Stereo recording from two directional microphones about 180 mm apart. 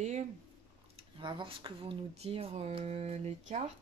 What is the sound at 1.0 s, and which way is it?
Speech, 25° right (ahead or behind).